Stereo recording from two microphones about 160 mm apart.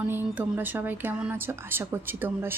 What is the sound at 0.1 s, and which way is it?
Speech, 10° right (ahead or behind).